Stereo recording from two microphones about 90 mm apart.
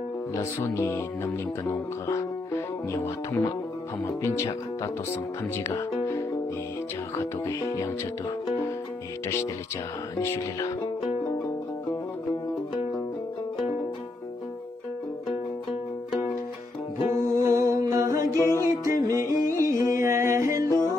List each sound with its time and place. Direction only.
0.3 s music: 30° left (ahead or behind)
4.0 s speech: 30° left (ahead or behind)
7.2 s speech: 35° left (ahead or behind)
17.1 s music: 40° right (ahead or behind)
18.3 s music: 30° left (ahead or behind)
18.9 s music: 35° right (ahead or behind)